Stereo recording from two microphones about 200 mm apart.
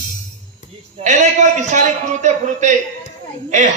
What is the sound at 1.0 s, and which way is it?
A man's voice, 35° right (ahead or behind).